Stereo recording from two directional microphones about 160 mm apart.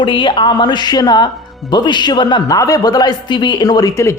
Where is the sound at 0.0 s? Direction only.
30° left (ahead or behind).